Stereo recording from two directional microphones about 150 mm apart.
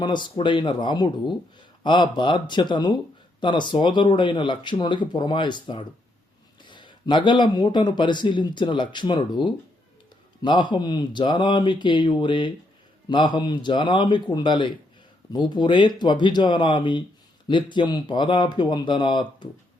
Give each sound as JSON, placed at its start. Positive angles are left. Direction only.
{"t": 0.0, "sound": "speech", "side_deg": 30}